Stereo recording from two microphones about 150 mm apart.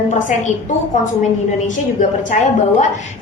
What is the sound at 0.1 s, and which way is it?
Speech, 55° left (ahead or behind).